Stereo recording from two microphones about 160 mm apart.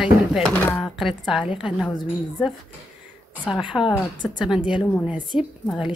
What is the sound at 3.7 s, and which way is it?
Speech, 15° left (ahead or behind).